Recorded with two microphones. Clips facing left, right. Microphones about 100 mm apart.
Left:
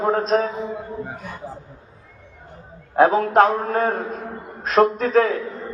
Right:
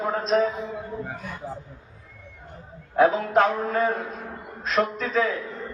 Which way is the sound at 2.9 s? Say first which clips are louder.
Left 4 dB; 45° left (ahead or behind).